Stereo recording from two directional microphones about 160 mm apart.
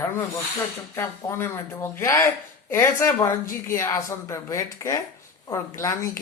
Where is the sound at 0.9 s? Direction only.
15° left (ahead or behind).